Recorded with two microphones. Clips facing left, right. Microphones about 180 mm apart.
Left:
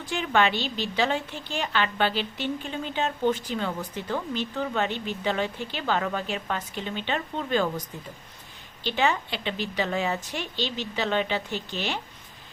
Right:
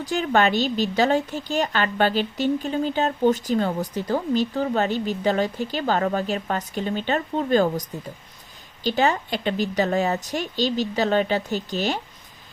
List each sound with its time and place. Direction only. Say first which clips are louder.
0.0 s a woman's voice: right 4 dB; 40° right (ahead or behind)